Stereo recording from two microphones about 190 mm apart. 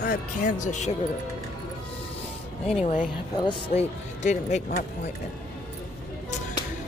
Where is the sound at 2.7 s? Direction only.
30° left (ahead or behind).